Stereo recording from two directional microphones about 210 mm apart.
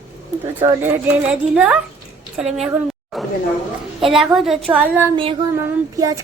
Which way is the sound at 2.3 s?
5° right (ahead or behind).